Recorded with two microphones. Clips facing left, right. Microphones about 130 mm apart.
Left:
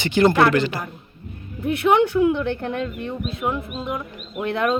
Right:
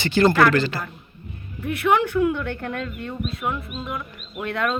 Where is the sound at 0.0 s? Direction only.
20° left (ahead or behind).